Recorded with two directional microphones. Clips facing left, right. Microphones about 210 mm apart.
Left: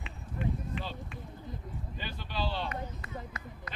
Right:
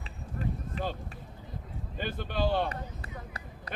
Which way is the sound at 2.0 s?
50° right (ahead or behind).